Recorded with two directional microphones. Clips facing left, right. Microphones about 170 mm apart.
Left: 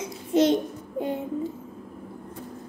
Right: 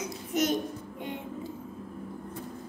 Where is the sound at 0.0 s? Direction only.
30° left (ahead or behind).